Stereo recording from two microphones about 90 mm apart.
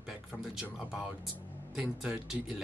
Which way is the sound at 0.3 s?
5° right (ahead or behind).